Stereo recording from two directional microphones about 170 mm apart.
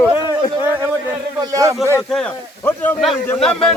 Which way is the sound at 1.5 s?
20° right (ahead or behind).